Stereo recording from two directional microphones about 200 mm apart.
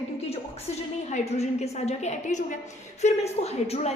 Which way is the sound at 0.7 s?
35° left (ahead or behind).